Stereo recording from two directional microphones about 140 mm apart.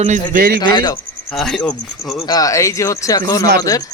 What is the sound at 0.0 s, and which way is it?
Speech, 65° right (ahead or behind).